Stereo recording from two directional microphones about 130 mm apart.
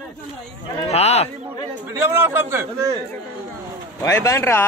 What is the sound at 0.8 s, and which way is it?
Speech, 55° left (ahead or behind).